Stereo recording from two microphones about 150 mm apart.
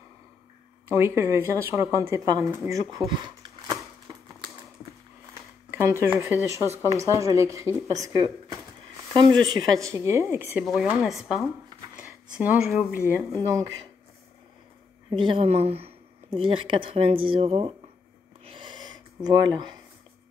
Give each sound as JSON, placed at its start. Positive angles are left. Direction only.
{"t": 0.8, "sound": "a woman's voice", "side_deg": -15}
{"t": 5.7, "sound": "a woman's voice", "side_deg": -15}
{"t": 9.1, "sound": "speech", "side_deg": -30}
{"t": 10.6, "sound": "speech", "side_deg": 0}
{"t": 12.0, "sound": "a sound", "side_deg": -10}
{"t": 12.7, "sound": "a woman's voice", "side_deg": -15}
{"t": 15.0, "sound": "speech", "side_deg": -35}
{"t": 18.4, "sound": "a sound", "side_deg": -35}